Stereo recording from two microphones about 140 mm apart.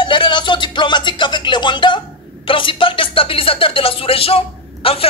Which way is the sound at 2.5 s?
35° left (ahead or behind).